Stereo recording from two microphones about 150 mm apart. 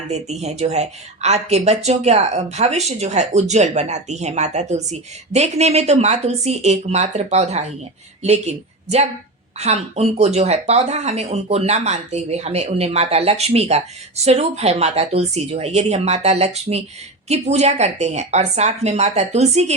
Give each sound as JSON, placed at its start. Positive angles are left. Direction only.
{"t": 0.1, "sound": "a woman's voice", "side_deg": -45}